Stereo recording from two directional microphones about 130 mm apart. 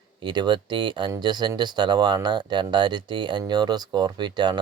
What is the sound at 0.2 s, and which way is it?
Speech, 35° right (ahead or behind).